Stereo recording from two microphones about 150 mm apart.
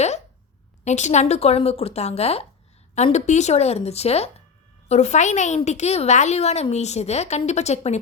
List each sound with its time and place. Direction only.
0.9 s a woman's voice: 50° left (ahead or behind)